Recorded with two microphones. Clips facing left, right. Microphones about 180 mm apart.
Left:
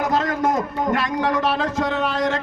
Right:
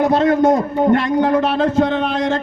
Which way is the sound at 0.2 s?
30° right (ahead or behind).